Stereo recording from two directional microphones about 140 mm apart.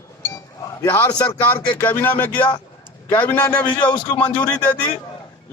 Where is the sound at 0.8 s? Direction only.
20° left (ahead or behind).